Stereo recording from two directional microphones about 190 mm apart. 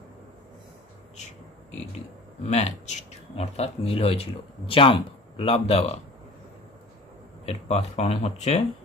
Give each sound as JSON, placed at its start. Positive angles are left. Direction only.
{"t": 2.4, "sound": "speech", "side_deg": 35}
{"t": 7.4, "sound": "speech", "side_deg": 35}